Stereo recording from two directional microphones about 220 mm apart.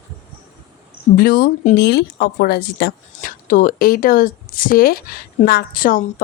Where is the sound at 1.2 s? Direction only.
45° left (ahead or behind).